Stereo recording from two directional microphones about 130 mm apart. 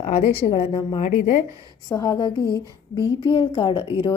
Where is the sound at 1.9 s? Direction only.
25° left (ahead or behind).